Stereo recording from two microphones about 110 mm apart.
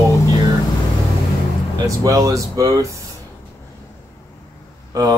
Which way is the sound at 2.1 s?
30° right (ahead or behind).